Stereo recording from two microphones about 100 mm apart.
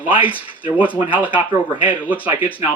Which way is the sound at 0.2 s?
15° right (ahead or behind).